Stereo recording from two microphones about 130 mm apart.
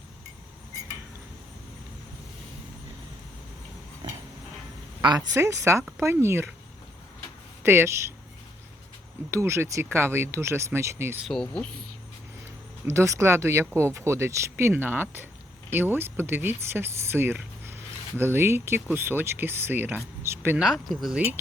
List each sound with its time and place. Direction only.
5.0 s speech: 30° right (ahead or behind)
7.6 s speech: 20° right (ahead or behind)
9.3 s speech: 20° right (ahead or behind)
11.3 s speech: 5° left (ahead or behind)
12.8 s speech: 20° right (ahead or behind)
20.6 s speech: centre (ahead or behind)